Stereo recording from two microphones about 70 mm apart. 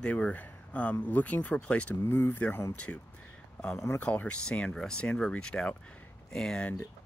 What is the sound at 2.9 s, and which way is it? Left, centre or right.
Speech, left.